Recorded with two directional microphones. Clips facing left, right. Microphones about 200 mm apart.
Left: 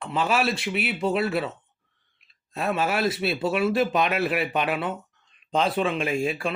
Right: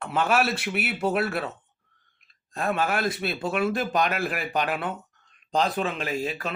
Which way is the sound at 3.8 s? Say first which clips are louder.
Left 3 dB; 45° right (ahead or behind).